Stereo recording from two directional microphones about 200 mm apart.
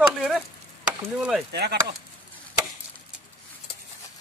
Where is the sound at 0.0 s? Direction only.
Centre (ahead or behind).